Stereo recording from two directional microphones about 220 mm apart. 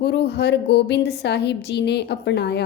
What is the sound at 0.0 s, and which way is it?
Speech, 50° left (ahead or behind).